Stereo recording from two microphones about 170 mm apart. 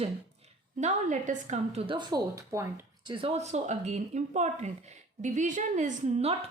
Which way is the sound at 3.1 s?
35° right (ahead or behind).